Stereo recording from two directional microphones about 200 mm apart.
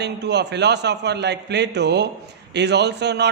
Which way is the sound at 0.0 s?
60° right (ahead or behind).